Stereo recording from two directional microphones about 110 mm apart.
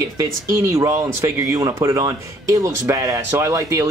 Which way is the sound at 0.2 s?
25° right (ahead or behind).